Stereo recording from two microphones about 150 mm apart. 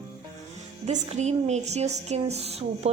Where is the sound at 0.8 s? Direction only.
50° right (ahead or behind).